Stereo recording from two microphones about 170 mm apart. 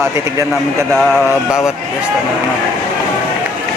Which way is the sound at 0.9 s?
Centre (ahead or behind).